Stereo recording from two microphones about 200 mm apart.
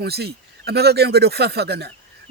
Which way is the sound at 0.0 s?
55° right (ahead or behind).